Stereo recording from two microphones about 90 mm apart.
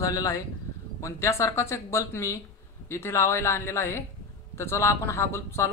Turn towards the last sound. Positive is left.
turn(degrees=30)  # may be behind; listen again after turning